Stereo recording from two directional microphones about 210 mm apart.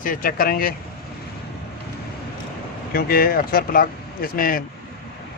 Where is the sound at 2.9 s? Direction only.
45° left (ahead or behind).